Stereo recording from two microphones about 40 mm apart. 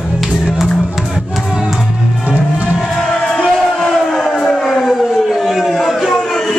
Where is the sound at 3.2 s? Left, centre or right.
Left.